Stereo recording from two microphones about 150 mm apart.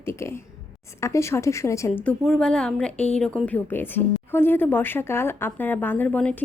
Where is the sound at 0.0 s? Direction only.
20° left (ahead or behind).